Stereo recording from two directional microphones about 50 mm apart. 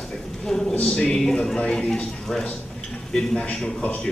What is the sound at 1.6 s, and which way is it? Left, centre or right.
Speech, left.